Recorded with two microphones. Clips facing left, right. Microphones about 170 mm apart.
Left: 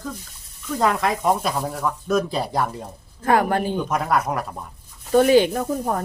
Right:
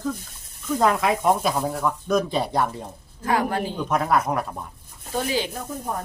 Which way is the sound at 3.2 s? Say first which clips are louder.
Left 4 dB; 55° left (ahead or behind).